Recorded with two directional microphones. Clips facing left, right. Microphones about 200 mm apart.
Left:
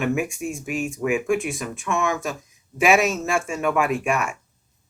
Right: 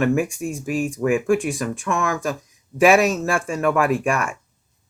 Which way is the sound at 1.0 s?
Centre (ahead or behind).